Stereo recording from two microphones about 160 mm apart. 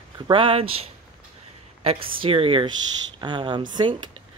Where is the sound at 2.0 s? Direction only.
35° right (ahead or behind).